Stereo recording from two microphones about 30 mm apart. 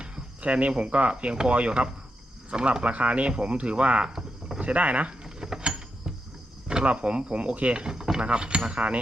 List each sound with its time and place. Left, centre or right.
0.4 s speech: right
4.0 s a sound: right
4.6 s speech: right
5.4 s a sound: centre
7.0 s speech: right
7.9 s speech: right